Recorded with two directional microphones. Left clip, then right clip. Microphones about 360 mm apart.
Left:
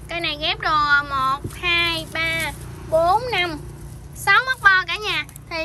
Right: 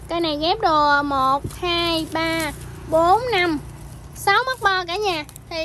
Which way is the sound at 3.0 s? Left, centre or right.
Centre.